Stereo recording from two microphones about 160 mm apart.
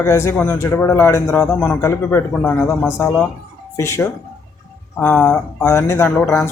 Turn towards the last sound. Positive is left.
turn(degrees=10)  # may be behind; listen again after turning